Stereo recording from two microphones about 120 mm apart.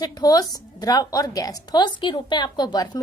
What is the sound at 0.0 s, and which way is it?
A woman's voice, 35° left (ahead or behind).